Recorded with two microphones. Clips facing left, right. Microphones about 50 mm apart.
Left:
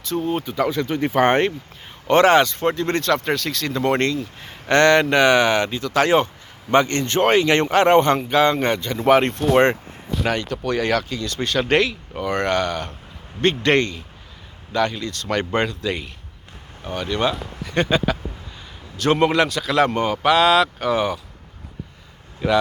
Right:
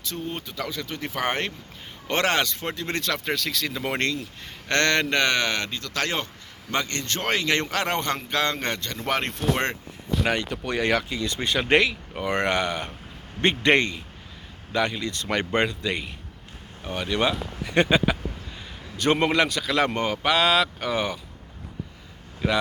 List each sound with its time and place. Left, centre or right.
0.0 s speech: centre
0.4 s speech: left
2.0 s speech: centre
9.5 s speech: left
10.2 s speech: centre
22.4 s speech: centre